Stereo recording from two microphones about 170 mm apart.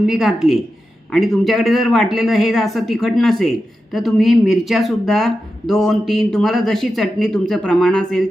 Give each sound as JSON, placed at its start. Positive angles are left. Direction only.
{"t": 0.0, "sound": "speech", "side_deg": 0}